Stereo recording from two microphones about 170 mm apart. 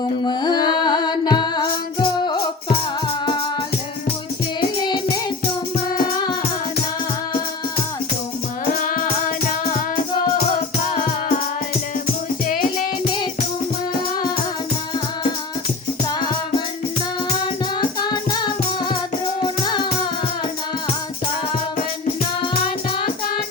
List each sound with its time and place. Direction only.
0.3 s music: 25° left (ahead or behind)
17.7 s music: 25° left (ahead or behind)